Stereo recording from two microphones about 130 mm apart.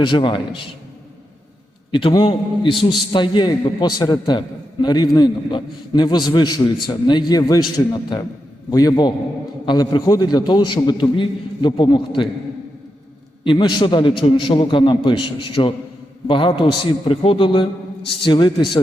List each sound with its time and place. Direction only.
0.0 s a man's voice: 40° left (ahead or behind)
1.9 s a man's voice: 40° left (ahead or behind)
13.4 s a man's voice: 40° left (ahead or behind)